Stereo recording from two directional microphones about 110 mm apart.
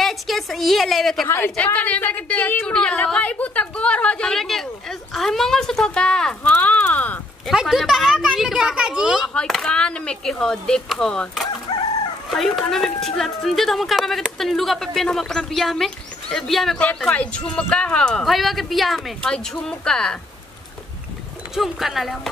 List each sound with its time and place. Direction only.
0.0 s a sound: centre (ahead or behind)
1.2 s a woman's voice: 20° left (ahead or behind)
7.4 s speech: centre (ahead or behind)
9.3 s a woman's voice: 5° left (ahead or behind)
21.5 s speech: centre (ahead or behind)